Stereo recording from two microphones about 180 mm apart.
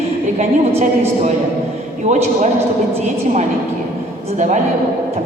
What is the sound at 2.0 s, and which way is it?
Speech, 40° right (ahead or behind).